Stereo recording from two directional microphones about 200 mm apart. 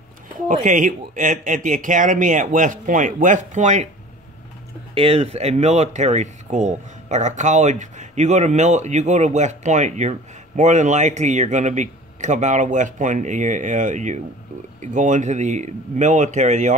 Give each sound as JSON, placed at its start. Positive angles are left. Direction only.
{"t": 0.5, "sound": "speech", "side_deg": -40}
{"t": 4.9, "sound": "speech", "side_deg": -30}